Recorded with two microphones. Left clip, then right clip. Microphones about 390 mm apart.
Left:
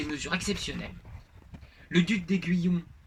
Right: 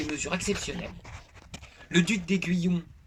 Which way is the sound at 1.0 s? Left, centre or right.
Right.